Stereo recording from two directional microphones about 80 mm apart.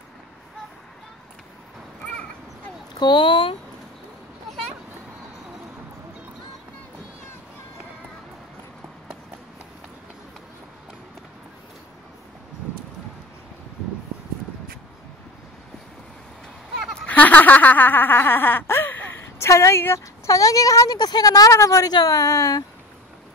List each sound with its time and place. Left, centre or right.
3.0 s speech: left
16.9 s a sound: centre; by 20.3 s left
20.3 s a woman's voice: left